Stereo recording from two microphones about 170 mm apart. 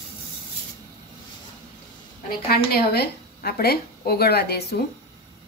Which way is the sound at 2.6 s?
65° left (ahead or behind).